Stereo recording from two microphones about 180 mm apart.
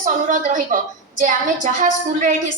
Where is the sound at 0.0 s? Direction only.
45° right (ahead or behind).